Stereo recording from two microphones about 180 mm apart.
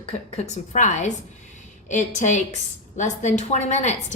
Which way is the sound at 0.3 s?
40° left (ahead or behind).